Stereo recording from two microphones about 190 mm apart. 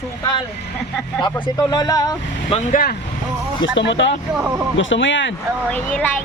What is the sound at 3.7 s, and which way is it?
Speech, 70° left (ahead or behind).